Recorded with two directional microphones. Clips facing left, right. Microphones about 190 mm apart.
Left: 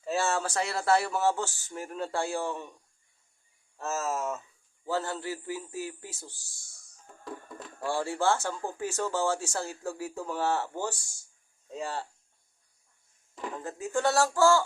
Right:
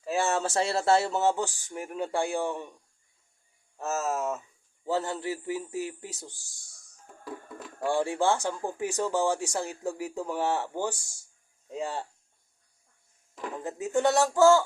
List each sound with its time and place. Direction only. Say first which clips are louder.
0.0 s speech: right 2 dB; 15° right (ahead or behind)
3.8 s speech: right 2 dB; 10° right (ahead or behind)
4.9 s speech: right 2 dB; 20° right (ahead or behind)
7.8 s speech: right 4 dB; 15° right (ahead or behind)
13.6 s speech: right 3 dB; 20° right (ahead or behind)